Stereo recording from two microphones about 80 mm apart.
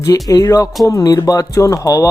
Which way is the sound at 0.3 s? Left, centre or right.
Left.